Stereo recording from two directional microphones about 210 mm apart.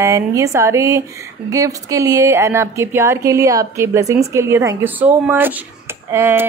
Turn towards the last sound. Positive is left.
turn(degrees=-10)  # may be behind; listen again after turning